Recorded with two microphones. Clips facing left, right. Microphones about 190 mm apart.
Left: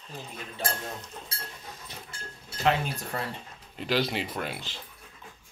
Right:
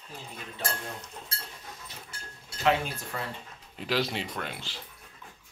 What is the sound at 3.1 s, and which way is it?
Speech, 40° left (ahead or behind).